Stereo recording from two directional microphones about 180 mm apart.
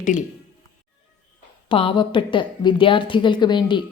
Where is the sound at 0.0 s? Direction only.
45° left (ahead or behind).